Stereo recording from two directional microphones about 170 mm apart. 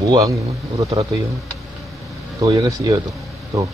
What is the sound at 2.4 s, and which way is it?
Speech, 25° right (ahead or behind).